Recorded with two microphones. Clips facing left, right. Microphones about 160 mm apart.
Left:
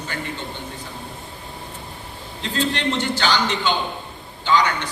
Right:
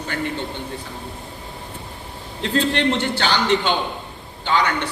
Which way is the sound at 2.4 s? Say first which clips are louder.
Right 4 dB; 60° right (ahead or behind).